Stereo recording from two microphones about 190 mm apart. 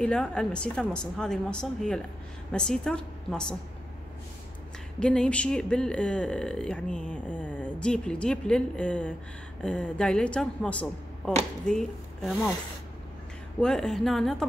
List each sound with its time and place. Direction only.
0.0 s speech: 5° left (ahead or behind)
5.0 s speech: 5° left (ahead or behind)
13.6 s speech: 5° left (ahead or behind)